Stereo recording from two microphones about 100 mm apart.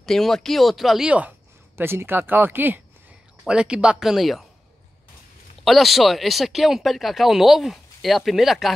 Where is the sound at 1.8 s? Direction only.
25° right (ahead or behind); by 4.5 s centre (ahead or behind).